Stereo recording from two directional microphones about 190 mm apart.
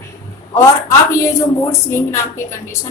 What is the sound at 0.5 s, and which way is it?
Speech, 15° left (ahead or behind).